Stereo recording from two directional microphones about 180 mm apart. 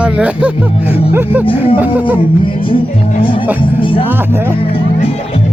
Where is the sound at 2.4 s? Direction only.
30° left (ahead or behind).